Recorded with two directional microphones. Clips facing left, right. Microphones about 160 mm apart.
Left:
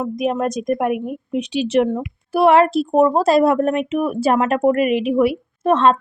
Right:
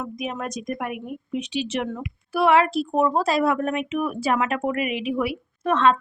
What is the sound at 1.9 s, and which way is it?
A woman's voice, 30° left (ahead or behind).